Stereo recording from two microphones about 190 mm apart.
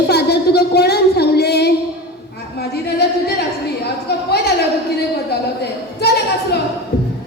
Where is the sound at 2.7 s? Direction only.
60° left (ahead or behind).